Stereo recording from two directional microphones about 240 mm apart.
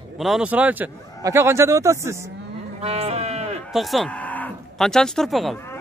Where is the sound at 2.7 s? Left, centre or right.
Right.